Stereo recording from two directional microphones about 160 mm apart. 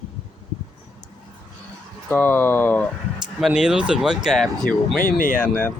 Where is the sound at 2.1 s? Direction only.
10° left (ahead or behind).